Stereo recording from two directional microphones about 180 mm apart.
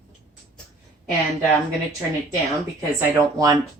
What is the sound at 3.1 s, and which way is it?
Speech, 20° right (ahead or behind).